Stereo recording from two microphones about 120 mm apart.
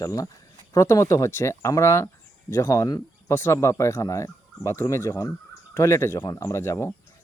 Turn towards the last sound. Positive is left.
turn(degrees=25)  # may be behind; listen again after turning